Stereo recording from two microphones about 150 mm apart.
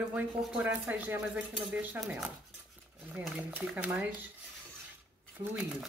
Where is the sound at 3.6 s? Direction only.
5° right (ahead or behind).